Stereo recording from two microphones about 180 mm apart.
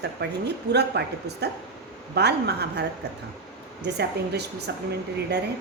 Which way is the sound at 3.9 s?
65° right (ahead or behind).